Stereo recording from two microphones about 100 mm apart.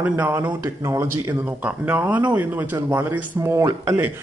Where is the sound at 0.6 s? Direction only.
30° right (ahead or behind).